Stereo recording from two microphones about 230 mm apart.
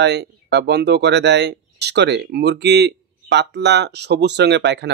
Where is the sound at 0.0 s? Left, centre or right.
Right.